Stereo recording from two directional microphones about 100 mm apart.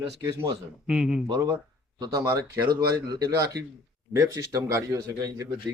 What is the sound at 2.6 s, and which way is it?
Speech, 40° right (ahead or behind).